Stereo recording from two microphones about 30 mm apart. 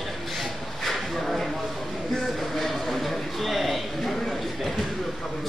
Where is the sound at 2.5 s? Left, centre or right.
Centre.